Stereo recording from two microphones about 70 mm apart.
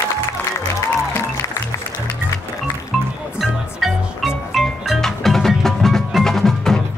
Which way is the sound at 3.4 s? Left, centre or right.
Centre.